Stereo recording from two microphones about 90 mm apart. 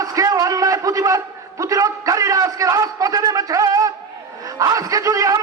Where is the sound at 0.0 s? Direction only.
40° right (ahead or behind).